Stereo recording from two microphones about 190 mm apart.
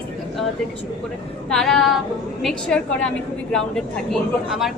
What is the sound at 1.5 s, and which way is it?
A woman's voice, 5° left (ahead or behind).